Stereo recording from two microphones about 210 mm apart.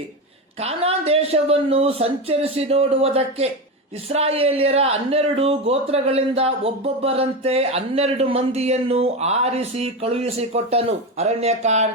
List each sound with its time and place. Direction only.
0.6 s speech: 30° right (ahead or behind)